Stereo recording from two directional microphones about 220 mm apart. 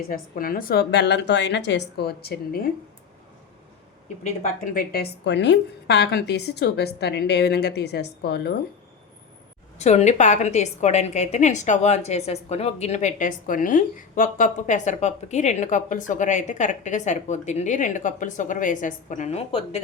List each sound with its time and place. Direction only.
0.1 s a woman's voice: 40° left (ahead or behind)
4.2 s a woman's voice: 35° left (ahead or behind)
9.7 s a woman's voice: 30° left (ahead or behind)